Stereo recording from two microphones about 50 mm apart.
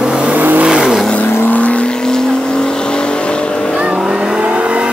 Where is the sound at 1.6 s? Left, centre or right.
Left.